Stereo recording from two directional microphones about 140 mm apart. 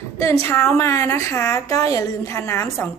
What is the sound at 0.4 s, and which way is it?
A woman's voice, 15° left (ahead or behind).